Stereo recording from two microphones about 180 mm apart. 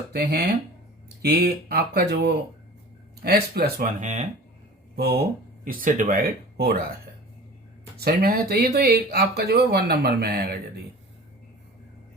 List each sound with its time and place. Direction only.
0.1 s speech: 65° right (ahead or behind)
4.0 s speech: 45° right (ahead or behind)
5.6 s speech: 45° right (ahead or behind)
7.9 s speech: 60° right (ahead or behind)